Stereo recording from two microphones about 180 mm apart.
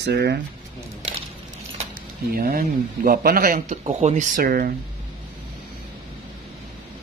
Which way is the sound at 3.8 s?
40° right (ahead or behind).